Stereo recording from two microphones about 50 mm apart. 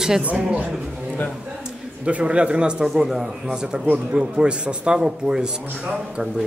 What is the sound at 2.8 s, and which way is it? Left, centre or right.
A woman's voice, centre.